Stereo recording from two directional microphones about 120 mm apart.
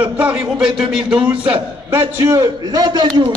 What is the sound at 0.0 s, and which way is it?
A man's voice, 10° right (ahead or behind).